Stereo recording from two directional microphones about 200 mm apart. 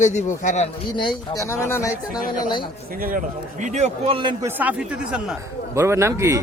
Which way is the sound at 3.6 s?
35° right (ahead or behind).